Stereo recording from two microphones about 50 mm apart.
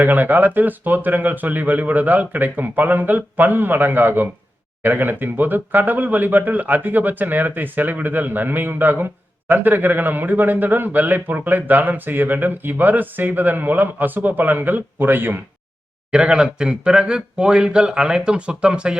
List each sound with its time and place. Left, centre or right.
0.0 s speech: right
16.1 s speech: centre